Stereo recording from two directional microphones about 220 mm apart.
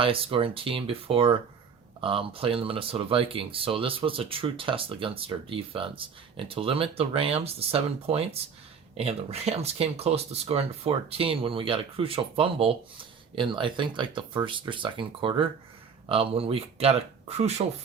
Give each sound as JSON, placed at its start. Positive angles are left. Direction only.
{"t": 0.0, "sound": "speech", "side_deg": -25}